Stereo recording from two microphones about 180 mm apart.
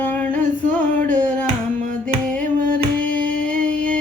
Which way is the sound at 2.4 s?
45° right (ahead or behind).